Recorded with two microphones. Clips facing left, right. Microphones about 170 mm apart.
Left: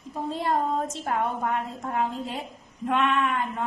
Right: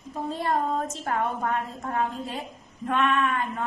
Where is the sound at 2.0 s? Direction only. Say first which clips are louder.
Left 1 dB; 20° left (ahead or behind).